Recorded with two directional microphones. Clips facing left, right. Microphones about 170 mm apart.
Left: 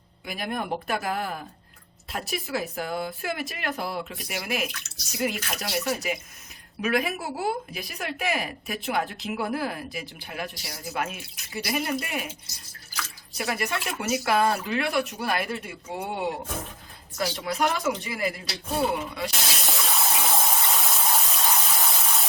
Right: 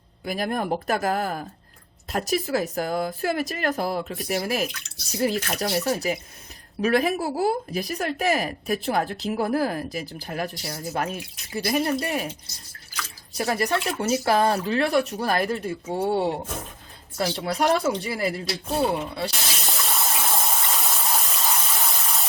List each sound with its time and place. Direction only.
0.3 s speech: 40° right (ahead or behind)
13.3 s speech: 35° right (ahead or behind)
19.3 s water: centre (ahead or behind)